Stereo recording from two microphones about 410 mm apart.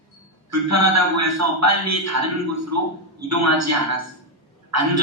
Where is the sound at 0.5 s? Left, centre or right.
Right.